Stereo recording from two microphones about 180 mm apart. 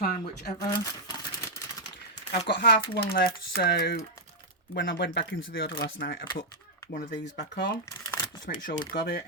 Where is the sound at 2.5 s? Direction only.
70° left (ahead or behind).